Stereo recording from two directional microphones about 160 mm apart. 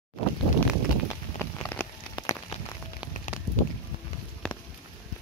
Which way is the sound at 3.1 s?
55° left (ahead or behind).